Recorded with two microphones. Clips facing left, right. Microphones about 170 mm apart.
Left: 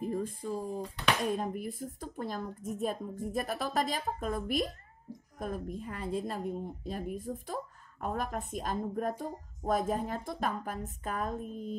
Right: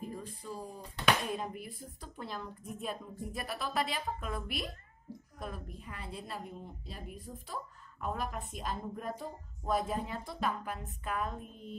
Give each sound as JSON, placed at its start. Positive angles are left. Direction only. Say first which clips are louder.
{"t": 0.1, "sound": "a woman's voice", "louder": "left 9 dB", "side_deg": 45}